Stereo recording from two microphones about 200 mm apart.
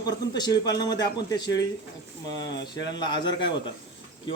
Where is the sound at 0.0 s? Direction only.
20° left (ahead or behind).